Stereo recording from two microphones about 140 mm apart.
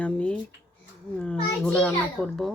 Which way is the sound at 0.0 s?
10° left (ahead or behind).